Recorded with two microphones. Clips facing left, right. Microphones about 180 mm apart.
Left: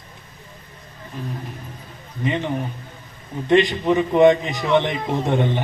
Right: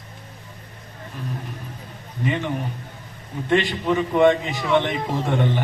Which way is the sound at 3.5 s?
20° left (ahead or behind).